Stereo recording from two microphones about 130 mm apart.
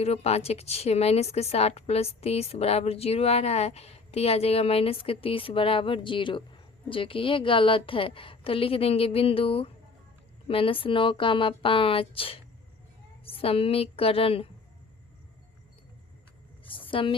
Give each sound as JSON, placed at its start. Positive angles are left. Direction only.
{"t": 0.0, "sound": "a woman's voice", "side_deg": 55}
{"t": 16.9, "sound": "a woman's voice", "side_deg": 40}